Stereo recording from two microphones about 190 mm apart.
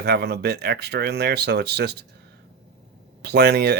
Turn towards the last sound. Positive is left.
turn(degrees=-55)  # may be behind; listen again after turning